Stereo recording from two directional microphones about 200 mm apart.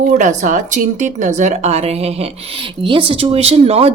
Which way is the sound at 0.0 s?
40° right (ahead or behind).